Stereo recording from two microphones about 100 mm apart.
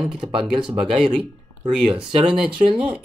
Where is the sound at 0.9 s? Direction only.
5° right (ahead or behind).